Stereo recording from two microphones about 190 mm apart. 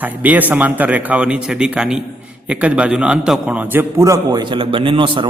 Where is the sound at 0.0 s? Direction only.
10° right (ahead or behind).